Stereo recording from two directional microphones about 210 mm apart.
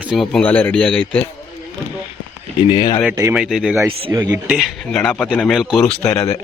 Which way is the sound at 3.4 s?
Centre (ahead or behind).